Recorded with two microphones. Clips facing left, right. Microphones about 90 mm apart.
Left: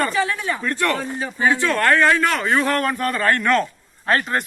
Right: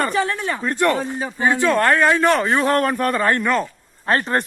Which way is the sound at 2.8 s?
40° right (ahead or behind).